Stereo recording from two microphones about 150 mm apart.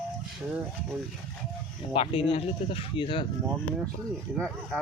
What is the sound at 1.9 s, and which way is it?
Speech, 40° left (ahead or behind).